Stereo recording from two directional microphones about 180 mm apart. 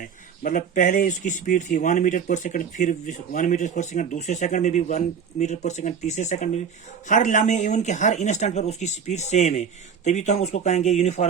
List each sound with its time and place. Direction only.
0.0 s speech: 50° left (ahead or behind)